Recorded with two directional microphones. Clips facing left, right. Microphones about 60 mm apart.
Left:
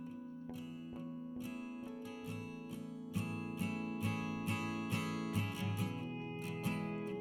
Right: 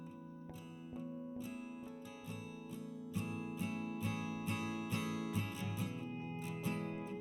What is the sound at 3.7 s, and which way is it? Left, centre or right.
Music, left.